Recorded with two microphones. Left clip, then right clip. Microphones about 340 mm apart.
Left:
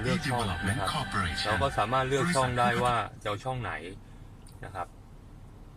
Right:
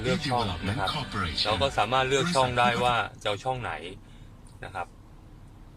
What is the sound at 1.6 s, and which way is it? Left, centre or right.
Speech, right.